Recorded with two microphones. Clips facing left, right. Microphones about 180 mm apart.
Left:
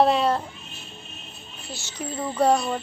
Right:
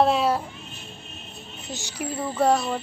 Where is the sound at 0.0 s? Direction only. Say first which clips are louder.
Left 1 dB; centre (ahead or behind).